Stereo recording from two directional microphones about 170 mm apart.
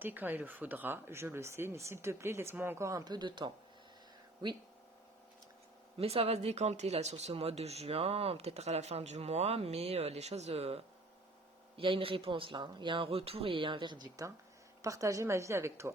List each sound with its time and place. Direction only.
0.0 s speech: 10° right (ahead or behind); by 3.5 s 25° right (ahead or behind)
6.0 s speech: 35° right (ahead or behind); by 15.9 s 15° right (ahead or behind)